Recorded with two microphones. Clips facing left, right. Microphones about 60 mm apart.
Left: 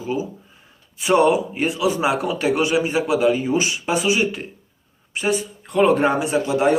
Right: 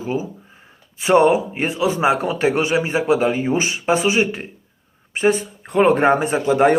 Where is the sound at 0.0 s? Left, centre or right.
Right.